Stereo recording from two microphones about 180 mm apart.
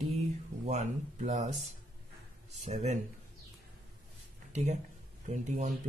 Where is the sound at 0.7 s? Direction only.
40° right (ahead or behind).